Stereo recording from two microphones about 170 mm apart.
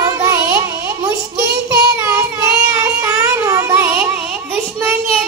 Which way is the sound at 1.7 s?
15° right (ahead or behind).